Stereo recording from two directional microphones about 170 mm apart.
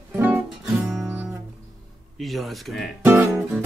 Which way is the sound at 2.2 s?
Centre (ahead or behind).